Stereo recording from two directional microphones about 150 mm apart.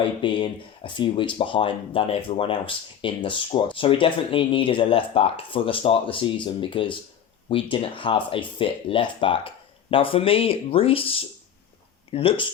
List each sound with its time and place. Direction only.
0.0 s speech: 35° left (ahead or behind)